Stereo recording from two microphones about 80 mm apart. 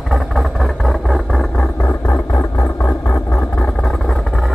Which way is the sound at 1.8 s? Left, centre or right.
Left.